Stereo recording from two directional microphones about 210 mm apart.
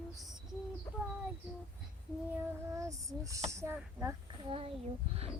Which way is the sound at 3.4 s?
10° right (ahead or behind).